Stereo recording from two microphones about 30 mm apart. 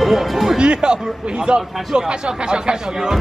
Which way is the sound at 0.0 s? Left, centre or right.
Centre.